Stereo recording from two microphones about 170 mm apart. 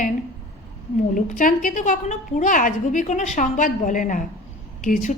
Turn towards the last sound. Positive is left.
turn(degrees=50)  # may be behind; listen again after turning